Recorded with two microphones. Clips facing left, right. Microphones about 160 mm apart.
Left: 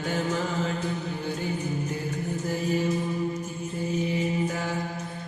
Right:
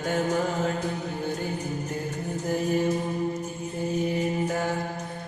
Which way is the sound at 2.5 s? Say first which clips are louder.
Right 3 dB; 50° right (ahead or behind).